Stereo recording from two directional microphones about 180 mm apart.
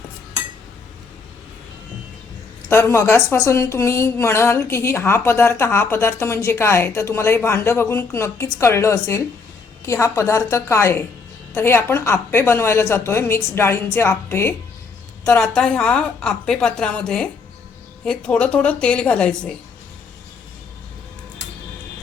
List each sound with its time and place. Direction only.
2.6 s a woman's voice: 15° left (ahead or behind)